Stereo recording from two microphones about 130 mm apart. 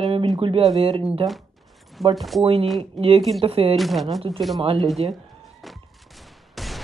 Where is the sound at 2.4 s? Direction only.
45° right (ahead or behind).